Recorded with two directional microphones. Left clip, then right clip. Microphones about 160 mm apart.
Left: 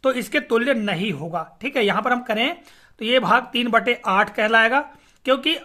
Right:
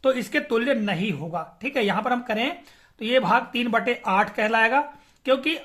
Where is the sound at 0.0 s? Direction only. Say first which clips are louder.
Left 2 dB; 30° left (ahead or behind).